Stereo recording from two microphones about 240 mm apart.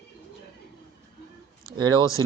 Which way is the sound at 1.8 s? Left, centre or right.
Centre.